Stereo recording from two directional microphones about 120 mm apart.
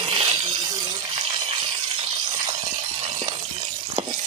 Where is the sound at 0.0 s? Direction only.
45° right (ahead or behind).